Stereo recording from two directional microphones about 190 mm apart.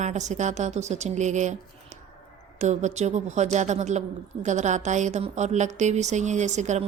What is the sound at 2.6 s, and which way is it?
A woman's voice, 40° right (ahead or behind).